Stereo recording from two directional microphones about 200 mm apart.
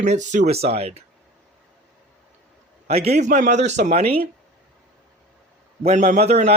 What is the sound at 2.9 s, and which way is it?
Speech, 30° right (ahead or behind).